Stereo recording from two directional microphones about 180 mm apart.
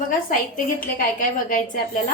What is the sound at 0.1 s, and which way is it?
A woman's voice, 50° left (ahead or behind).